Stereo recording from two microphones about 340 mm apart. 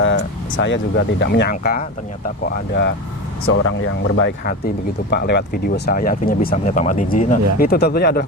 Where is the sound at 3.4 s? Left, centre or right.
Left.